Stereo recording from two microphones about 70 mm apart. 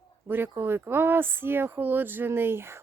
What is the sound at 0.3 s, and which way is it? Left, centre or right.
Speech, right.